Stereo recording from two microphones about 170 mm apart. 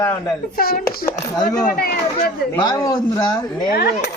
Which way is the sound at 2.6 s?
20° left (ahead or behind).